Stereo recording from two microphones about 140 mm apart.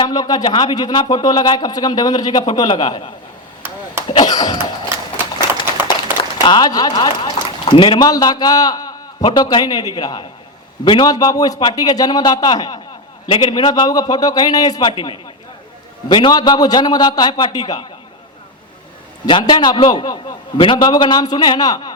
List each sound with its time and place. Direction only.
0.0 s speech: 30° left (ahead or behind)
6.1 s a man's voice: 30° left (ahead or behind)
19.2 s a man's voice: 30° left (ahead or behind)